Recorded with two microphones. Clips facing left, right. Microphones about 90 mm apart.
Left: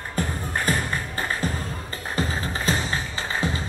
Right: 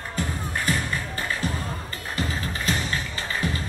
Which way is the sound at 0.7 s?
40° left (ahead or behind).